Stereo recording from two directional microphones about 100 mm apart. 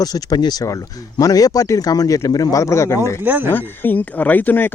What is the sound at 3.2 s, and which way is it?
Speech, 20° right (ahead or behind).